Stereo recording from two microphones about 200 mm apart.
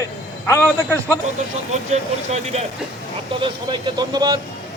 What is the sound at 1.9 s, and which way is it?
Speech, 35° right (ahead or behind).